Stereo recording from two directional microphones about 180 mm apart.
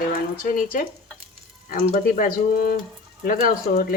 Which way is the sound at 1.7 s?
50° left (ahead or behind).